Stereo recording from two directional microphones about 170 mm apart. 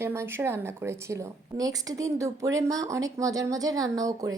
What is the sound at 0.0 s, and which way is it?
Speech, 15° right (ahead or behind).